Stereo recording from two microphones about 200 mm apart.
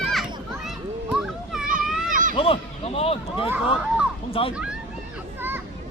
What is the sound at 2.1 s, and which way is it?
Children playing, 40° right (ahead or behind).